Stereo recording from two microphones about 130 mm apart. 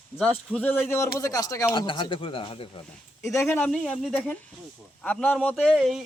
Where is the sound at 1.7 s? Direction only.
35° left (ahead or behind).